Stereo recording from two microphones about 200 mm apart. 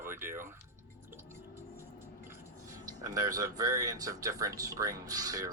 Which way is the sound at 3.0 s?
20° right (ahead or behind).